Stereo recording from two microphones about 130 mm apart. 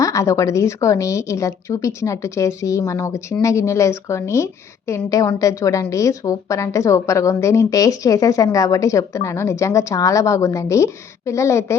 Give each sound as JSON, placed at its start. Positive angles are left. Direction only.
{"t": 0.0, "sound": "a woman's voice", "side_deg": 25}